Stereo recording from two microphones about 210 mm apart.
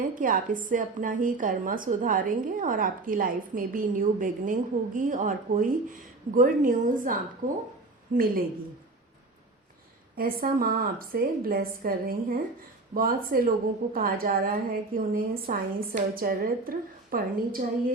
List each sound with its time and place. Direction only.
0.2 s a woman's voice: 40° right (ahead or behind)
10.2 s a woman's voice: 45° right (ahead or behind)